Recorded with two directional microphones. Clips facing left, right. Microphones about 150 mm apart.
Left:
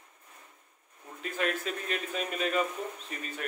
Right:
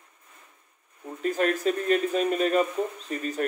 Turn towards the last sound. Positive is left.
turn(degrees=-40)  # may be behind; listen again after turning